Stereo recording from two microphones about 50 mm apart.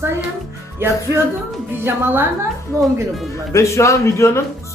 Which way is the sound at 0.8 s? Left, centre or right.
Right.